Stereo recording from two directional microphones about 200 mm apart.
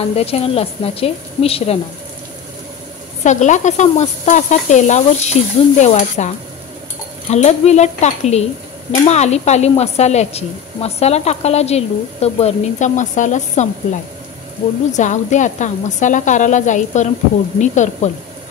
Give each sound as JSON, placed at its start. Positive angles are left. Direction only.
{"t": 0.1, "sound": "a woman's voice", "side_deg": 30}
{"t": 3.3, "sound": "a woman's voice", "side_deg": 35}
{"t": 14.9, "sound": "a woman's voice", "side_deg": 35}